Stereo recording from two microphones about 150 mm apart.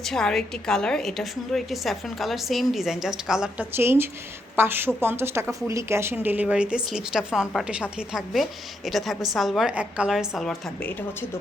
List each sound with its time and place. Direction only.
0.0 s a woman's voice: 5° left (ahead or behind)